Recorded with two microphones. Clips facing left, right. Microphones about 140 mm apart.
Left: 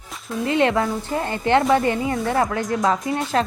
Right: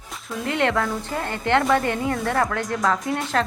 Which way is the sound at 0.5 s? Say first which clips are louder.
Left 3 dB; 15° left (ahead or behind).